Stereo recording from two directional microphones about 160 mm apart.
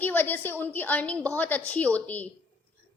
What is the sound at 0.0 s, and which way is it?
A woman's voice, 10° left (ahead or behind).